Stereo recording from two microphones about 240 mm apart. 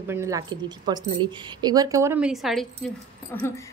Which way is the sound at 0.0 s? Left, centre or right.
Centre.